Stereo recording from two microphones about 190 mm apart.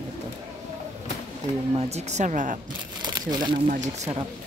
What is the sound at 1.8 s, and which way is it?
Speech, 35° right (ahead or behind).